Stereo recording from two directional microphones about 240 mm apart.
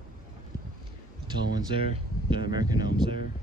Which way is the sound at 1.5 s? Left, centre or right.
Right.